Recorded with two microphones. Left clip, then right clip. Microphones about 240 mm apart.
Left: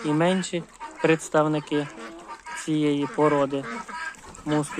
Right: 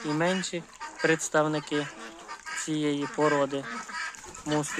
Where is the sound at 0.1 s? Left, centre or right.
Centre.